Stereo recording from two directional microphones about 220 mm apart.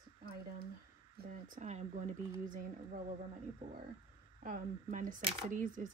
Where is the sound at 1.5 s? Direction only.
30° right (ahead or behind).